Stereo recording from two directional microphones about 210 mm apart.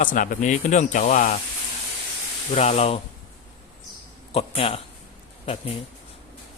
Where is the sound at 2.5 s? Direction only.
30° left (ahead or behind).